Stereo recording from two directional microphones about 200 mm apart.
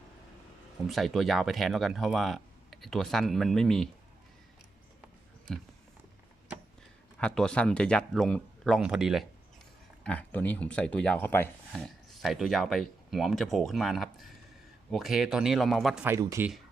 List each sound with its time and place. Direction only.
0.9 s speech: centre (ahead or behind)
7.2 s speech: 5° left (ahead or behind)
16.0 s speech: 15° right (ahead or behind)